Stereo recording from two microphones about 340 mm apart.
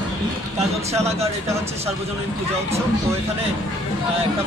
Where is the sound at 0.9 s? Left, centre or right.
Centre.